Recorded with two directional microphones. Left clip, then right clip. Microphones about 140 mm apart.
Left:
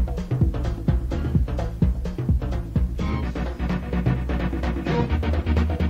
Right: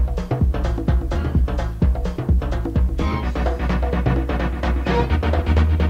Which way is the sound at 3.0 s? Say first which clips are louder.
Right 6 dB; 35° right (ahead or behind).